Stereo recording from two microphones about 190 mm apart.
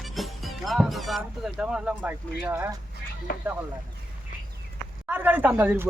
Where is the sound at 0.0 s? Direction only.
Centre (ahead or behind).